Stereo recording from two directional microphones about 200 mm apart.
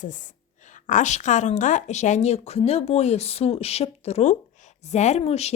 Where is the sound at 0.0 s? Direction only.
40° left (ahead or behind).